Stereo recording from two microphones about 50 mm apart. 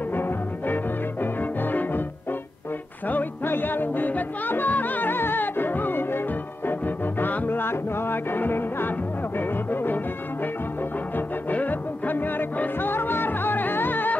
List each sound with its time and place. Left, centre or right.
0.1 s music: left
3.1 s music: left
9.4 s speech: left
11.5 s music: left